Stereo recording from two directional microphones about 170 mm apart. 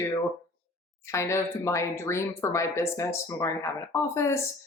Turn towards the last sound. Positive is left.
turn(degrees=15)  # may be behind; listen again after turning